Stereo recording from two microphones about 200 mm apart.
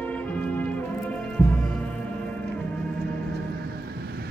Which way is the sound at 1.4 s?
10° left (ahead or behind).